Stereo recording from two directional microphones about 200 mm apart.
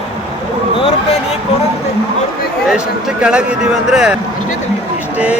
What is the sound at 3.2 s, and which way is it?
Speech, 5° right (ahead or behind).